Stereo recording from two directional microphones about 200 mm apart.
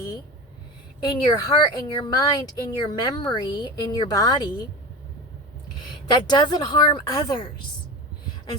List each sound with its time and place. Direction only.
1.0 s a woman's voice: 20° left (ahead or behind)
6.1 s a woman's voice: 20° left (ahead or behind)